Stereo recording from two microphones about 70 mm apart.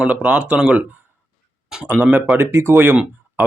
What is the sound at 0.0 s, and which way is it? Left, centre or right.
Speech, right.